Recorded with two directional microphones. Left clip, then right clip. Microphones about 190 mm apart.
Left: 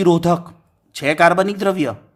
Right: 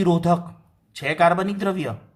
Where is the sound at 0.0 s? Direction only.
40° left (ahead or behind).